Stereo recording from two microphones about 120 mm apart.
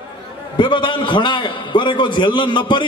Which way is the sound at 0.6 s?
40° left (ahead or behind).